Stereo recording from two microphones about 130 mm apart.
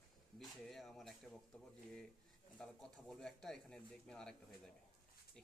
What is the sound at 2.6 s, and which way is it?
Speech, 5° left (ahead or behind).